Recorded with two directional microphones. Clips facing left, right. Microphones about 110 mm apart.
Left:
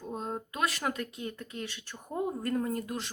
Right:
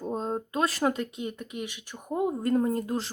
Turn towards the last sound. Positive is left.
turn(degrees=-30)  # may be behind; listen again after turning